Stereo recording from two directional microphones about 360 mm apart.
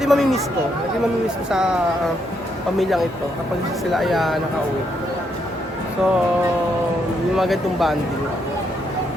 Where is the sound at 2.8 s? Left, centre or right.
Centre.